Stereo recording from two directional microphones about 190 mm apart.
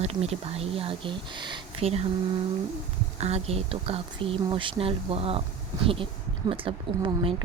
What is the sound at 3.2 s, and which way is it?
Speech, 35° right (ahead or behind).